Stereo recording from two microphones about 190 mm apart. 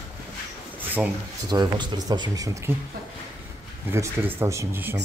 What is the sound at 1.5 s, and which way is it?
Speech, 20° right (ahead or behind).